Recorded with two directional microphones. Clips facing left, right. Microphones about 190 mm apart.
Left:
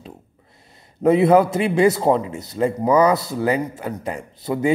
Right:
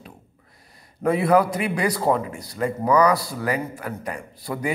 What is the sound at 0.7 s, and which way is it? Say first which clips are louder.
A man's voice: left 6 dB; 25° left (ahead or behind).